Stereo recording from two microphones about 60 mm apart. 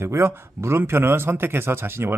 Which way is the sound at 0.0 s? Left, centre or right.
Right.